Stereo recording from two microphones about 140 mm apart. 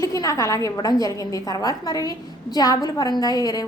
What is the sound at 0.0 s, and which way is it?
A woman's voice, 25° left (ahead or behind).